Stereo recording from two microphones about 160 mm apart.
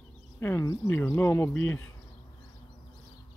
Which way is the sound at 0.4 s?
15° left (ahead or behind).